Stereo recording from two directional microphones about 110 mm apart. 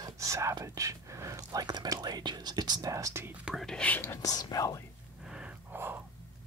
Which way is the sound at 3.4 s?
Centre (ahead or behind).